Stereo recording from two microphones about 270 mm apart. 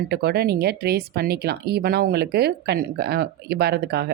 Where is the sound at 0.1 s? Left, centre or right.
Right.